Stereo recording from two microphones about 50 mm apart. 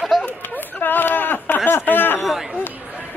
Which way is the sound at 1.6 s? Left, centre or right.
Left.